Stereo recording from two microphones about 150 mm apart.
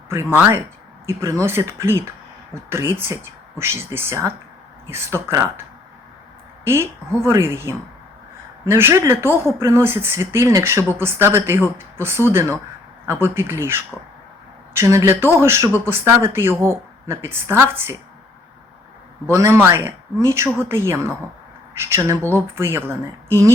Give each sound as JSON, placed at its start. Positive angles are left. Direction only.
{"t": 0.1, "sound": "a woman's voice", "side_deg": -15}
{"t": 6.7, "sound": "a woman's voice", "side_deg": -15}
{"t": 19.3, "sound": "a woman's voice", "side_deg": -20}